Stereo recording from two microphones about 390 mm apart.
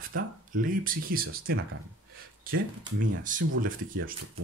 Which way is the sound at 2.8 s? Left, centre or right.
Centre.